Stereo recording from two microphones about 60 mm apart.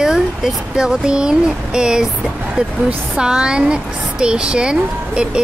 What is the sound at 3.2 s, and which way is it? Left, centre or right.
Speech, centre.